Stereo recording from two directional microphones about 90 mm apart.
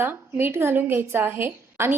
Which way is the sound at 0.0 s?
25° right (ahead or behind).